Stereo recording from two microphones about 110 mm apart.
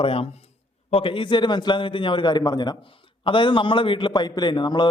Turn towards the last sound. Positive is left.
turn(degrees=45)  # may be behind; listen again after turning